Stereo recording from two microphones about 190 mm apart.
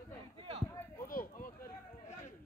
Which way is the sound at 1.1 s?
45° left (ahead or behind).